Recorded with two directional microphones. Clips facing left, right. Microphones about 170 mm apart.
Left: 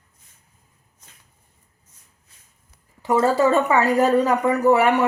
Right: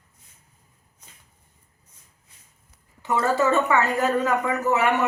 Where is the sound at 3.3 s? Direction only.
35° left (ahead or behind).